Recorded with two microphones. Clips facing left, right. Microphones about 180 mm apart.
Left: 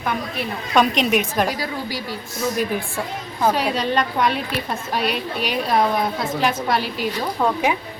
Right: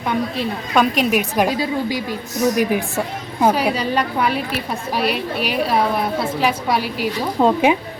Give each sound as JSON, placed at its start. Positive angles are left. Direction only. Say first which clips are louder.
{"t": 0.7, "sound": "a woman's voice", "louder": "even", "side_deg": -5}
{"t": 1.5, "sound": "a woman's voice", "louder": "right 6 dB", "side_deg": -20}
{"t": 7.3, "sound": "a woman's voice", "louder": "right 7 dB", "side_deg": -25}